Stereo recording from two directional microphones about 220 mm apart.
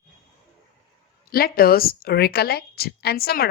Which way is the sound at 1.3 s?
45° left (ahead or behind).